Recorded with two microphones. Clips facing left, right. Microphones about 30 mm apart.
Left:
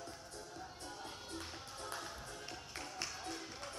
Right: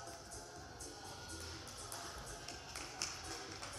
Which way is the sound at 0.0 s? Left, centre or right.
Left.